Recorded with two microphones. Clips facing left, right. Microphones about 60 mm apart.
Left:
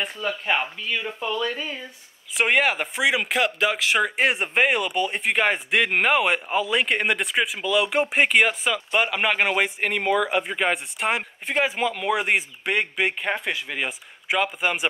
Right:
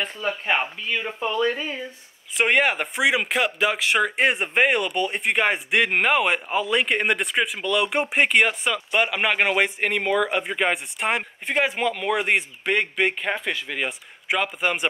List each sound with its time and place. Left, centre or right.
0.5 s speech: centre
1.2 s speech: right
2.3 s speech: centre